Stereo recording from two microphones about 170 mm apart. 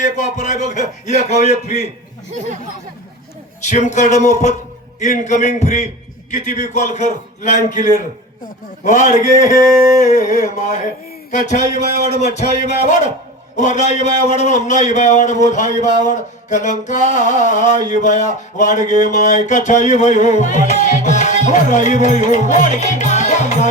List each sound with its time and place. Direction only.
0.0 s a man's voice: 45° left (ahead or behind)
3.7 s a man's voice: 45° left (ahead or behind)